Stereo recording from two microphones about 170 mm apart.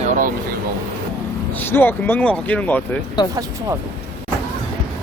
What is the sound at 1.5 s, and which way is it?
Speech, 10° left (ahead or behind).